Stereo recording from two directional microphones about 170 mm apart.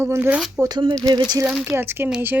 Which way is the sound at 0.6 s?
25° right (ahead or behind).